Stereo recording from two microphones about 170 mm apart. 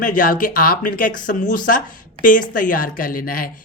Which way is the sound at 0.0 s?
55° left (ahead or behind).